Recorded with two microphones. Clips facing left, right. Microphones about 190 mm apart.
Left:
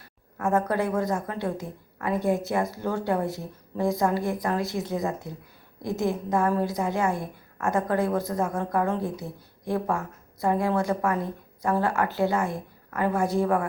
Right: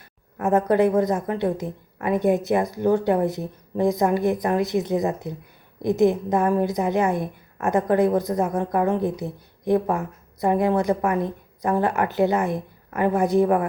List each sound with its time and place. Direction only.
0.3 s a woman's voice: 20° right (ahead or behind)